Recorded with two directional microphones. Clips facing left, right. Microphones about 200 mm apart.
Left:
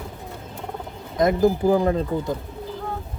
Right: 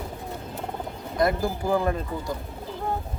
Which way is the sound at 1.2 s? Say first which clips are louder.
Left 6 dB; 20° left (ahead or behind).